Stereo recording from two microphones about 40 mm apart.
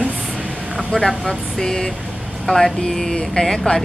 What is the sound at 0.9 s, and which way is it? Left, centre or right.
Speech, centre.